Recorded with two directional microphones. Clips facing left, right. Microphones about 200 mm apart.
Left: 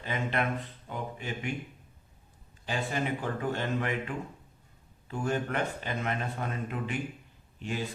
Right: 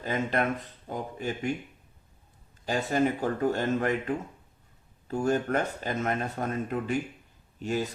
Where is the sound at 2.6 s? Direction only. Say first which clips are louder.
Right 6 dB; 40° right (ahead or behind).